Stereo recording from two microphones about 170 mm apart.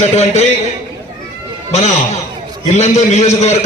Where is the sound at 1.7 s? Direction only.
40° left (ahead or behind).